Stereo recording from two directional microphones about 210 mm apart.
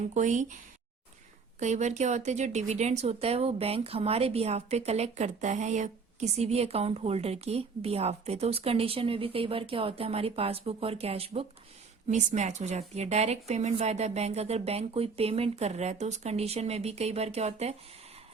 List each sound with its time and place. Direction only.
0.1 s a woman's voice: 35° right (ahead or behind)